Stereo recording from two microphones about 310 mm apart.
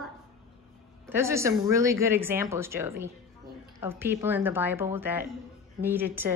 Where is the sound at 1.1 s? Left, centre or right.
Centre.